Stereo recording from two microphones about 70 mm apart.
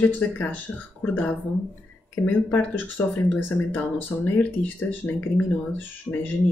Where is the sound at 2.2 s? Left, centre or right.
Left.